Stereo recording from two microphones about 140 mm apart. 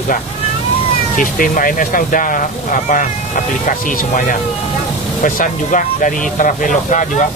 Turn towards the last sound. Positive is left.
turn(degrees=65)  # may be behind; listen again after turning